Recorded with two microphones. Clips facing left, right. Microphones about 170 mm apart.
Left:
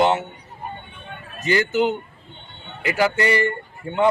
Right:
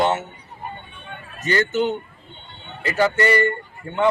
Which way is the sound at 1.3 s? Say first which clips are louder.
Left 1 dB; 10° left (ahead or behind).